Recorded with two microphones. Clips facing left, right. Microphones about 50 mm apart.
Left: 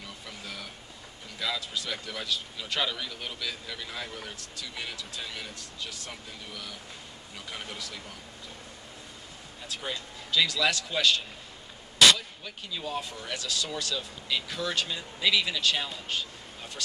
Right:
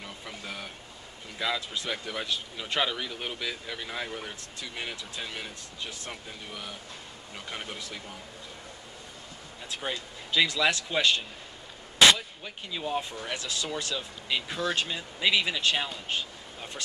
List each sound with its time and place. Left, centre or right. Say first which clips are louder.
0.0 s a sound: right 2 dB; right
1.4 s a man's voice: right 2 dB; right
9.9 s a man's voice: right 1 dB; right